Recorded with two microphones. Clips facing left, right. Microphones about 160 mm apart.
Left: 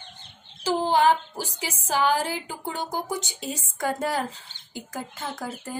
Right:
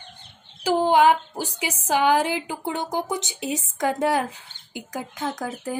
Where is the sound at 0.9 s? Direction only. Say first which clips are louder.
Right 1 dB; 15° right (ahead or behind).